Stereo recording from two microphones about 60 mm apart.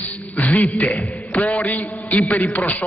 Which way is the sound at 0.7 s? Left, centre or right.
Left.